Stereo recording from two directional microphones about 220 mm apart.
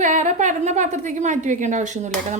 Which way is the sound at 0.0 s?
35° right (ahead or behind).